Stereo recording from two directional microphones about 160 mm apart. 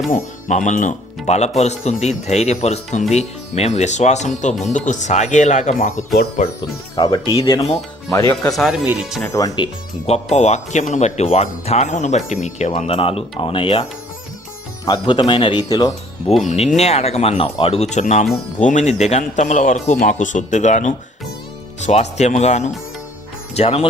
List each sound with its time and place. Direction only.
0.1 s speech: 50° left (ahead or behind)
6.9 s speech: 25° left (ahead or behind)
7.4 s speech: 35° left (ahead or behind)
8.1 s speech: 20° left (ahead or behind)
8.5 s speech: centre (ahead or behind)
9.2 s speech: 20° left (ahead or behind)
10.3 s speech: 45° left (ahead or behind)
12.7 s speech: 40° left (ahead or behind)
14.8 s speech: 30° left (ahead or behind)
16.5 s speech: 45° left (ahead or behind)